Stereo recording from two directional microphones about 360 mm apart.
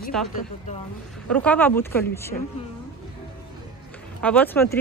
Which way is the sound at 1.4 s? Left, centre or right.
Centre.